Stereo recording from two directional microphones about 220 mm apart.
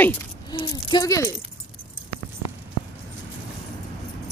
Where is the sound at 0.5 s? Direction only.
20° left (ahead or behind).